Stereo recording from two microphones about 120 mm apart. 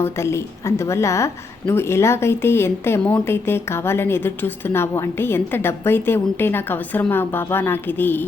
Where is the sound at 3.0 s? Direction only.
10° left (ahead or behind).